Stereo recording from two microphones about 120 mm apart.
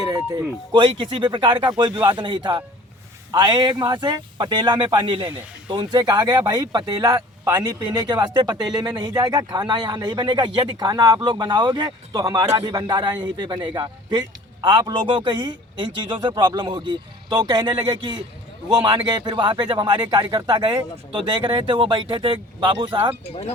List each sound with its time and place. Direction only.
0.7 s speech: 40° right (ahead or behind)
23.3 s speech: 60° left (ahead or behind)